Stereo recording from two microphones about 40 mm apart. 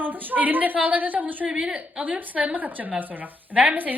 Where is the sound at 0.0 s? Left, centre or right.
Right.